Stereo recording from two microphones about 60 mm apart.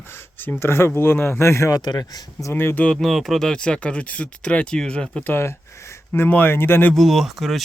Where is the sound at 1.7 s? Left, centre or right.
Left.